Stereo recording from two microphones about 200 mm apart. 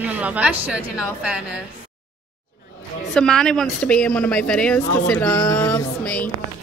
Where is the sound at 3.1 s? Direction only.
5° left (ahead or behind).